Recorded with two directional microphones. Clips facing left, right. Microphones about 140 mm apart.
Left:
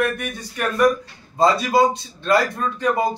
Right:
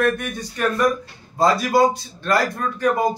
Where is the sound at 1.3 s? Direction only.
25° left (ahead or behind).